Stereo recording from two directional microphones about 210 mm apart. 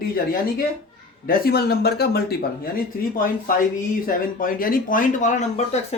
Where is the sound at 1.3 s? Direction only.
45° left (ahead or behind).